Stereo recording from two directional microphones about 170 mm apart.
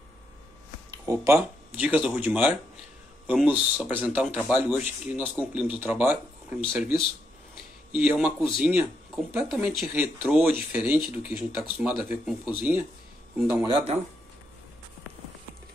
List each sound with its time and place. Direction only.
0.9 s speech: 20° right (ahead or behind)
6.8 s speech: centre (ahead or behind)
13.7 s speech: 25° right (ahead or behind)